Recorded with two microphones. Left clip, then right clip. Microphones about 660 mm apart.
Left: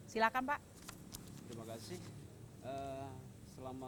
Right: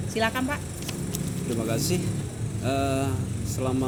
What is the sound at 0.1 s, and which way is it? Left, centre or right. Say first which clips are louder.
Speech: right 8 dB; left.